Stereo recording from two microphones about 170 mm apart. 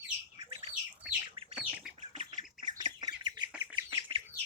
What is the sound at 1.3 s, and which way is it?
Bird, 30° right (ahead or behind).